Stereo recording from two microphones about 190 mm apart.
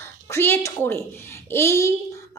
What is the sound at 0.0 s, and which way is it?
A child's voice, 15° left (ahead or behind).